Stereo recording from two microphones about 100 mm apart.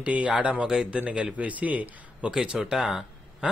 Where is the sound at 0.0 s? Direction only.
15° right (ahead or behind).